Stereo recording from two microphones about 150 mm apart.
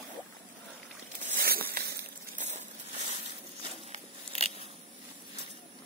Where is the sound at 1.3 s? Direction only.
85° right.